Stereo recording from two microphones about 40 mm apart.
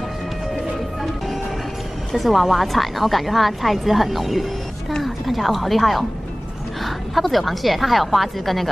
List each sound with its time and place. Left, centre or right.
2.1 s a woman's voice: centre